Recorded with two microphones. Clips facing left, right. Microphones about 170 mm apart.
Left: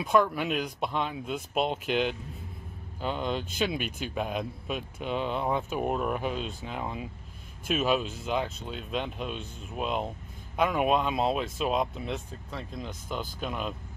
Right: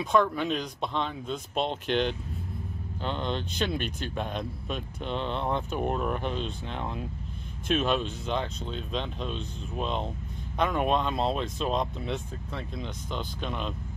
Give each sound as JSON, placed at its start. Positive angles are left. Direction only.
{"t": 0.0, "sound": "speech", "side_deg": 5}